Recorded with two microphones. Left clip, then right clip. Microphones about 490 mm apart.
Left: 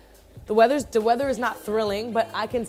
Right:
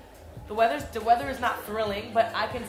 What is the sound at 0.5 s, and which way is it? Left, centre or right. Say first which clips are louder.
A woman's voice: left 6 dB; left.